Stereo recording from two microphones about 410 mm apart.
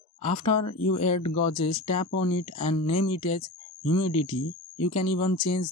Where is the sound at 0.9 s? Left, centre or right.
Centre.